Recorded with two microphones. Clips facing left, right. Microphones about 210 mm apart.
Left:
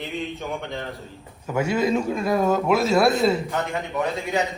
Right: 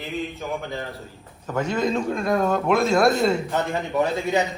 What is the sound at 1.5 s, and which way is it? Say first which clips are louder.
A man's voice: left 2 dB; 10° left (ahead or behind).